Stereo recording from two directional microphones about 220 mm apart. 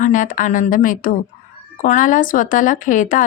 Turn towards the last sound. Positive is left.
turn(degrees=35)  # may be behind; listen again after turning